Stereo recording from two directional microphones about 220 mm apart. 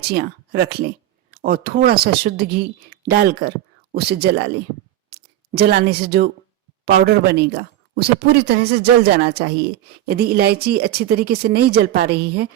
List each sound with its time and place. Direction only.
0.1 s speech: 45° right (ahead or behind)
5.5 s speech: 45° right (ahead or behind)